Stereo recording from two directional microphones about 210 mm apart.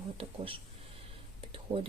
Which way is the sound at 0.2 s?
25° right (ahead or behind).